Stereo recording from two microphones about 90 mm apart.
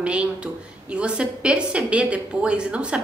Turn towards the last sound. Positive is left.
turn(degrees=-10)  # may be behind; listen again after turning